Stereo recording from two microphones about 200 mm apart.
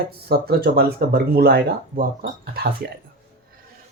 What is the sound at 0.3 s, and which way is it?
Speech, 50° right (ahead or behind).